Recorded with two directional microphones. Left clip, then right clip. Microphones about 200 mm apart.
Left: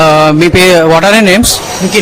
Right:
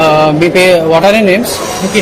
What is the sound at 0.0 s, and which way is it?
Mantra, 50° left (ahead or behind).